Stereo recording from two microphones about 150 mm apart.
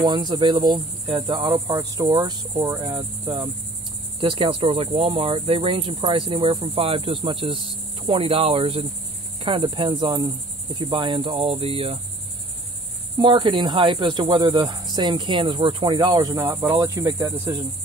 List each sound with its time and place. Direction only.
0.0 s cricket: 30° right (ahead or behind)
13.2 s cricket: 35° right (ahead or behind)